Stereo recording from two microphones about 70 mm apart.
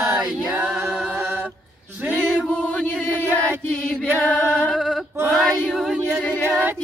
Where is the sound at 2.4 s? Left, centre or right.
Centre.